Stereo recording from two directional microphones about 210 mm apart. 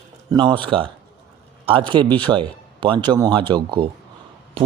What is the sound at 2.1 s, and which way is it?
A man's voice, 20° right (ahead or behind).